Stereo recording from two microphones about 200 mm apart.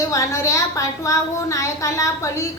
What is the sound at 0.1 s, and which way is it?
A woman's voice, 15° left (ahead or behind).